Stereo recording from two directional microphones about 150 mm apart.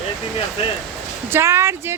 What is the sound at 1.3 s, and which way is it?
Speech, 15° right (ahead or behind).